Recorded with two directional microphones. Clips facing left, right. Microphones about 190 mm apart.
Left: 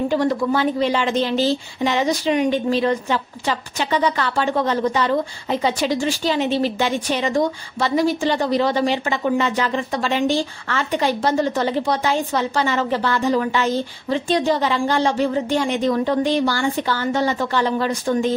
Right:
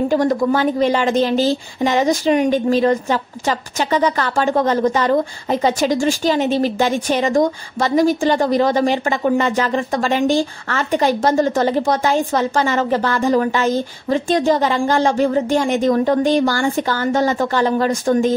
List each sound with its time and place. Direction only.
0.1 s a woman's voice: 45° right (ahead or behind)